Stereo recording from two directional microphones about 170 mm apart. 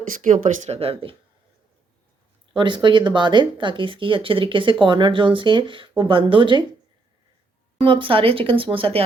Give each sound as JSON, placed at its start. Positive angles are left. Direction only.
{"t": 0.2, "sound": "a woman's voice", "side_deg": -50}
{"t": 2.6, "sound": "speech", "side_deg": -30}
{"t": 7.8, "sound": "a woman's voice", "side_deg": -30}